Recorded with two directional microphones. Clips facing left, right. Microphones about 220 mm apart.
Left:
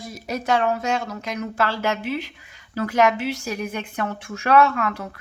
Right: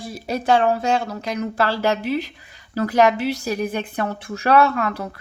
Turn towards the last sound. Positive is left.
turn(degrees=-35)  # may be behind; listen again after turning